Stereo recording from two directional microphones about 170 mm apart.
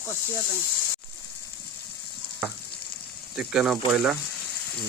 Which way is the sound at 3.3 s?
5° right (ahead or behind).